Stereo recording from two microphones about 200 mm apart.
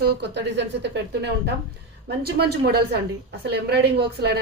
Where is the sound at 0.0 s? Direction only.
60° right (ahead or behind).